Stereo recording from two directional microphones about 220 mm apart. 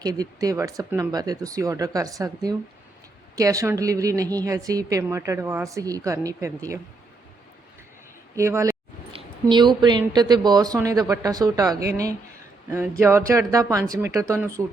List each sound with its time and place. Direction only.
0.0 s a woman's voice: 15° right (ahead or behind)
8.4 s a woman's voice: 15° right (ahead or behind)